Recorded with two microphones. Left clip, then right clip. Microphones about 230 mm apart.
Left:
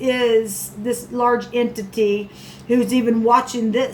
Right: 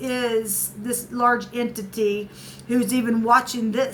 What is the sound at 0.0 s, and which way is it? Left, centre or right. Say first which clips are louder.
Speech: left 7 dB; right.